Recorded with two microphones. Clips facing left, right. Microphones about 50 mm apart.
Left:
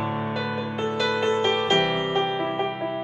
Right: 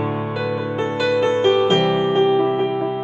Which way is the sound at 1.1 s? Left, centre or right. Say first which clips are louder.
Right 8 dB; centre.